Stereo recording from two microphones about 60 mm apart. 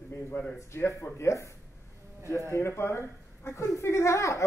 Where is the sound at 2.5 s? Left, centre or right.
Left.